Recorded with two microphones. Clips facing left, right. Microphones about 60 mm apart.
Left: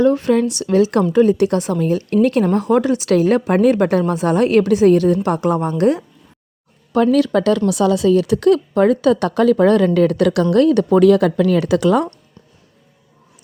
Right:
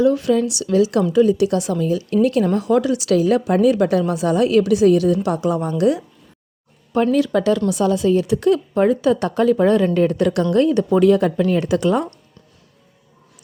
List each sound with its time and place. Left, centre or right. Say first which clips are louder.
0.0 s a woman's voice: left 2 dB; left
6.9 s speech: left 3 dB; left
7.7 s speech: left 3 dB; left
10.5 s speech: left 3 dB; left